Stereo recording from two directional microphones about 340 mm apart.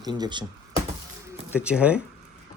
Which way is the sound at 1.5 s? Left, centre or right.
Centre.